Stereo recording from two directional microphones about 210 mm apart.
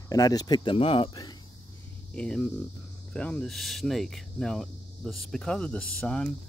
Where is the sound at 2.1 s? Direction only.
5° left (ahead or behind).